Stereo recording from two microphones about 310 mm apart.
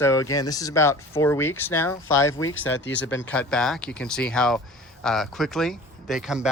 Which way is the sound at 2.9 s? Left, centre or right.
Centre.